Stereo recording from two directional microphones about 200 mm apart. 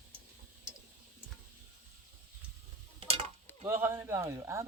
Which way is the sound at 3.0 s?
30° right (ahead or behind).